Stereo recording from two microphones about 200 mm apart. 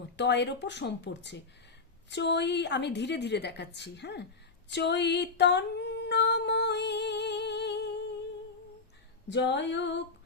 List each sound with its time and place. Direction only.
0.2 s a woman's voice: 60° left (ahead or behind)
4.7 s a sound: 60° left (ahead or behind)
9.3 s a woman's voice: 60° left (ahead or behind)